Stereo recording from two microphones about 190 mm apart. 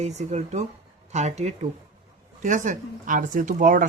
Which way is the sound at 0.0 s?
35° right (ahead or behind).